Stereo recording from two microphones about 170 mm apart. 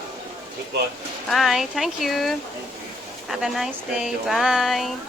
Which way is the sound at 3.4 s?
5° right (ahead or behind).